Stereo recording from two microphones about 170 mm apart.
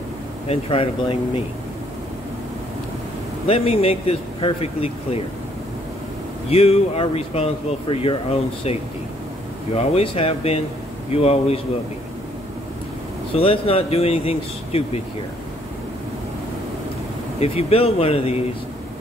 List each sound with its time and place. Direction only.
0.5 s speech: 35° left (ahead or behind)
3.4 s speech: 35° left (ahead or behind)
6.5 s speech: 35° left (ahead or behind)
9.8 s speech: 35° left (ahead or behind)
13.4 s speech: 35° left (ahead or behind)
17.4 s speech: 35° left (ahead or behind)